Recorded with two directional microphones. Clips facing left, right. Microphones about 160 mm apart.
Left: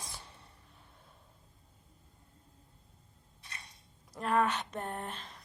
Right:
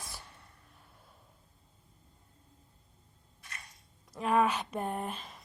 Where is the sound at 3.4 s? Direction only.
30° left (ahead or behind).